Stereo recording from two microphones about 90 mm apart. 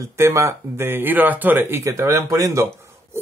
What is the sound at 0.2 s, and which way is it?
Speech, 30° right (ahead or behind).